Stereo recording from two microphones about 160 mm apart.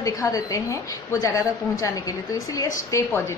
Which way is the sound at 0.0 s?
20° left (ahead or behind).